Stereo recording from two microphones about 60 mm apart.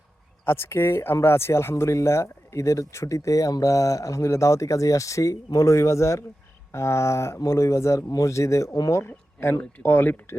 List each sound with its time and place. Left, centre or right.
0.4 s speech: left
9.8 s speech: left